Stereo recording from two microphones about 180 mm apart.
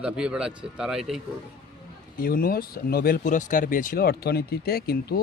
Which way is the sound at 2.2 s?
55° left (ahead or behind).